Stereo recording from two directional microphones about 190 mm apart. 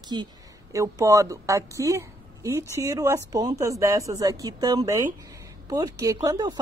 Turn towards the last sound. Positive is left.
turn(degrees=-20)  # may be behind; listen again after turning